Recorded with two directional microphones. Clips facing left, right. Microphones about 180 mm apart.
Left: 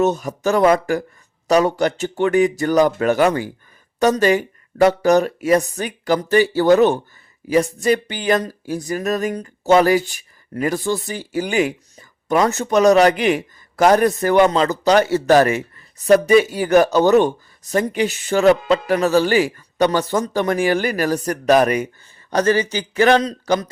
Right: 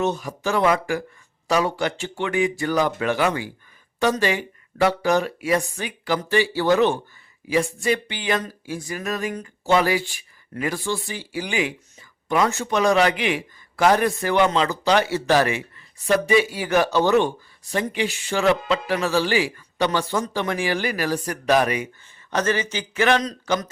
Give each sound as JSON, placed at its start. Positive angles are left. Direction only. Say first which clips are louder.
{"t": 0.0, "sound": "speech", "louder": "left 6 dB", "side_deg": 45}